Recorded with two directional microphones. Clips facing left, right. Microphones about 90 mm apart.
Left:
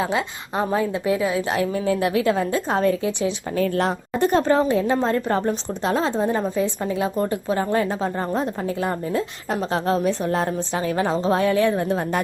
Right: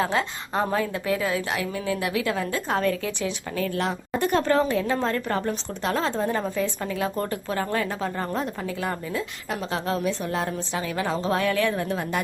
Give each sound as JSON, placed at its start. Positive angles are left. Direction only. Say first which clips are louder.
{"t": 0.0, "sound": "a woman's voice", "louder": "left 1 dB", "side_deg": 10}
{"t": 1.5, "sound": "a woman's voice", "louder": "left 6 dB", "side_deg": 35}
{"t": 3.6, "sound": "a woman's voice", "louder": "left 5 dB", "side_deg": 40}
{"t": 4.2, "sound": "a woman's voice", "louder": "left 4 dB", "side_deg": 25}
{"t": 9.1, "sound": "a woman's voice", "louder": "left 5 dB", "side_deg": 35}